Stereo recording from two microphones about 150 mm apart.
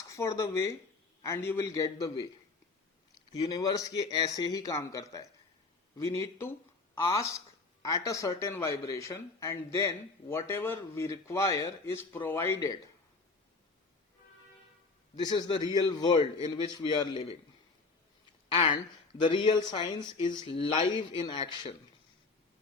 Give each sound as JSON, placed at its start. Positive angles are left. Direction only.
{"t": 0.1, "sound": "a man's voice", "side_deg": 20}
{"t": 3.5, "sound": "a man's voice", "side_deg": 25}
{"t": 15.1, "sound": "a man's voice", "side_deg": 30}
{"t": 18.5, "sound": "speech", "side_deg": 30}